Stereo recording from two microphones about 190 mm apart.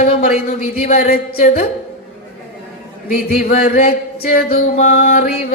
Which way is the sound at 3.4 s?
50° left (ahead or behind).